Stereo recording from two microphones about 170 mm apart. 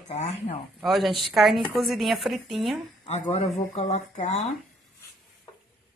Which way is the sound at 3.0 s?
40° left (ahead or behind).